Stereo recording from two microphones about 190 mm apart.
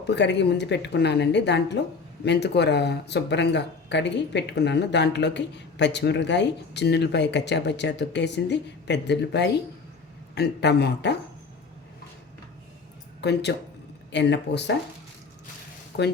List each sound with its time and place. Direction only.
0.0 s speech: 65° left (ahead or behind)
13.2 s speech: 60° left (ahead or behind)